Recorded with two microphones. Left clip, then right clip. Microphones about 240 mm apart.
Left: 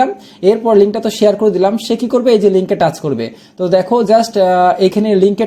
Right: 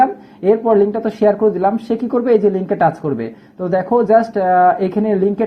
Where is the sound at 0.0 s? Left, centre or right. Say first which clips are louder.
Left 2 dB; left.